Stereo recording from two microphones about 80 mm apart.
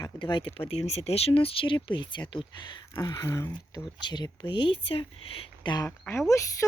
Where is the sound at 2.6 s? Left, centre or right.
Left.